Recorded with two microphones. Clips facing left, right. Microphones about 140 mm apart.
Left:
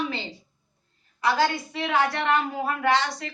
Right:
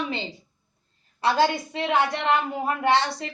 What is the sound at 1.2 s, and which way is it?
A woman's voice, 25° right (ahead or behind).